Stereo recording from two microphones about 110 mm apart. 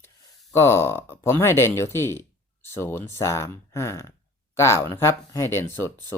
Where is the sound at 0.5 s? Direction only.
25° left (ahead or behind).